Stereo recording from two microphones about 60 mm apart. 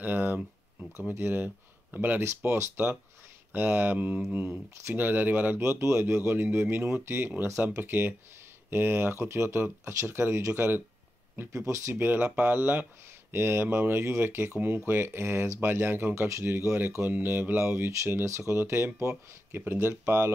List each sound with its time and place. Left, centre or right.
0.0 s a sound: right
1.1 s speech: right
2.4 s speech: right
3.5 s speech: right
5.6 s speech: right
11.5 s speech: right
11.9 s speech: right
13.3 s speech: right
15.6 s speech: right
16.3 s speech: right